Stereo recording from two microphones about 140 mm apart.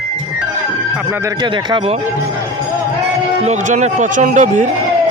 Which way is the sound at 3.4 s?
55° right (ahead or behind).